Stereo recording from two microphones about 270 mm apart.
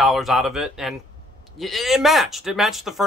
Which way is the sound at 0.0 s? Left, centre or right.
Centre.